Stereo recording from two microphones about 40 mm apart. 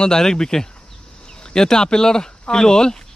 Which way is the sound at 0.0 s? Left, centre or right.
Centre.